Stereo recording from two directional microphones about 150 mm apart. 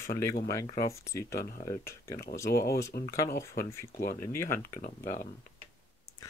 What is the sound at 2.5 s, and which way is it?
Speech, 90° left.